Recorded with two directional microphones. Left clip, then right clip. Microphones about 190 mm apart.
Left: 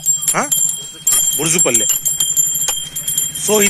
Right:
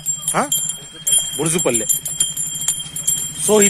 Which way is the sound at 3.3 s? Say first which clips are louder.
Right 1 dB; 15° right (ahead or behind).